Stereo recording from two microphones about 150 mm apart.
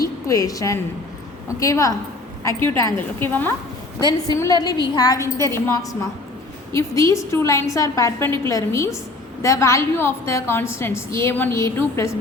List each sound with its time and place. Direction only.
0.0 s a woman's voice: 25° left (ahead or behind)
4.4 s a woman's voice: 25° left (ahead or behind)